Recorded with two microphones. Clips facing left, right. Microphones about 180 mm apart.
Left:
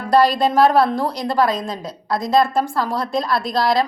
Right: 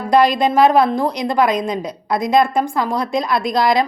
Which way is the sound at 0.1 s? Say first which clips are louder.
Right 1 dB; 15° right (ahead or behind).